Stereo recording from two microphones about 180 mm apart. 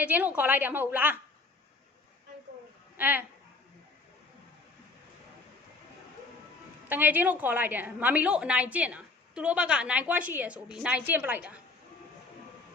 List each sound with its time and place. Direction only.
0.0 s a woman's voice: 10° right (ahead or behind)
3.0 s a woman's voice: 10° right (ahead or behind)
6.8 s a woman's voice: 10° right (ahead or behind)